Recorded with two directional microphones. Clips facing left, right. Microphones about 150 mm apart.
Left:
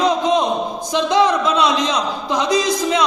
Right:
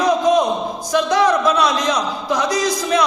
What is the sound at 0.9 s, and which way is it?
A man's voice, 20° left (ahead or behind).